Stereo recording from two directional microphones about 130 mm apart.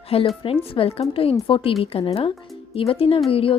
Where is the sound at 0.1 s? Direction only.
50° left (ahead or behind).